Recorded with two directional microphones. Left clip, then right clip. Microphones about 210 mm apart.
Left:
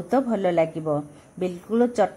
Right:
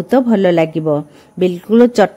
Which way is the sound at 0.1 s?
45° right (ahead or behind).